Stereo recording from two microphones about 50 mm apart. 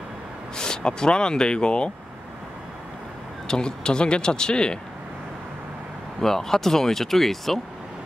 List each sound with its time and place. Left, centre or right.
0.6 s speech: centre
3.4 s speech: centre
6.2 s speech: centre